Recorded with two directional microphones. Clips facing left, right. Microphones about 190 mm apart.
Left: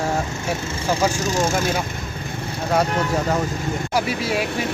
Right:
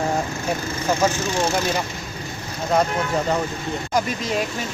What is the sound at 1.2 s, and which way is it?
Speech, 45° left (ahead or behind).